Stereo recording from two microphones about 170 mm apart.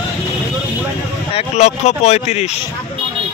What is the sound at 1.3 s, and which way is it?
Speech, 40° left (ahead or behind).